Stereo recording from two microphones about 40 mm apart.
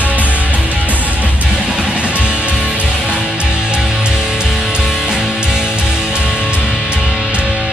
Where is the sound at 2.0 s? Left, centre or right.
Right.